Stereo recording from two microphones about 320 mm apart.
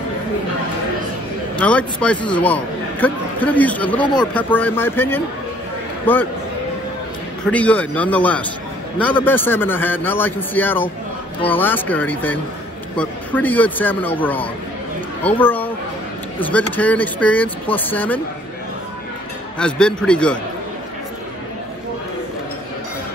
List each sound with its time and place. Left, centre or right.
1.6 s a man's voice: centre
7.4 s a man's voice: centre
19.6 s a man's voice: centre